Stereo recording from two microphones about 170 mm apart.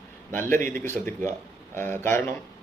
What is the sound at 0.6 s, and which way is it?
Speech, 50° right (ahead or behind).